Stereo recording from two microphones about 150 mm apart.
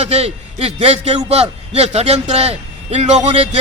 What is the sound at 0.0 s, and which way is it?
A man's voice, 45° right (ahead or behind).